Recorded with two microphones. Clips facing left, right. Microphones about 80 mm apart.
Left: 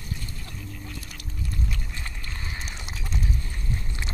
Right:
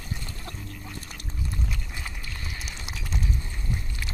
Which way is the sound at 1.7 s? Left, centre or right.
Centre.